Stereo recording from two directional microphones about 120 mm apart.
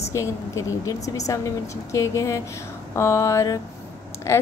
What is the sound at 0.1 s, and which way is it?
Speech, 25° left (ahead or behind).